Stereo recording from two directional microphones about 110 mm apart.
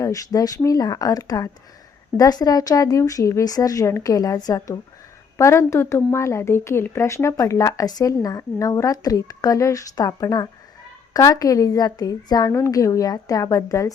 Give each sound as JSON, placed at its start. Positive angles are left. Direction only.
{"t": 0.0, "sound": "a woman's voice", "side_deg": 30}